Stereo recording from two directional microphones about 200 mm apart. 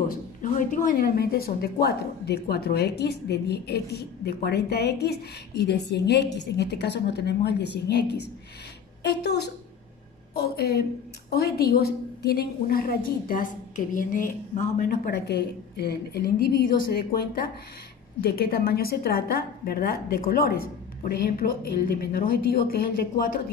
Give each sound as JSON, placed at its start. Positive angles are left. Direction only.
{"t": 0.4, "sound": "a woman's voice", "side_deg": 40}
{"t": 18.2, "sound": "a woman's voice", "side_deg": 50}